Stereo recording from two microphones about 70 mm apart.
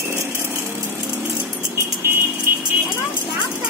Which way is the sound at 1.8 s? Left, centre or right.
Right.